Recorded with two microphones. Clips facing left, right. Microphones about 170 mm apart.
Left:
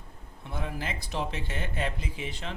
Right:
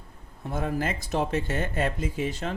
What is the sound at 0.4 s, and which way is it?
Speech, 45° right (ahead or behind).